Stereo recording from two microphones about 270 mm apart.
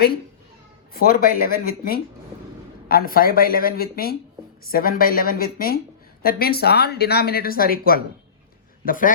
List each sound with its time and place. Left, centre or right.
0.9 s a man's voice: left